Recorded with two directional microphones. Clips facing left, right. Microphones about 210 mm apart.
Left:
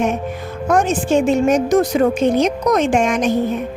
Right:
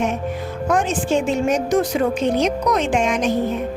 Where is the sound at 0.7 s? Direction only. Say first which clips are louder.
Left 4 dB; 45° left (ahead or behind).